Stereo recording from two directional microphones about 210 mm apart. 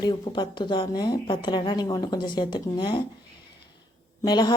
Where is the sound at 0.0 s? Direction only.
20° left (ahead or behind).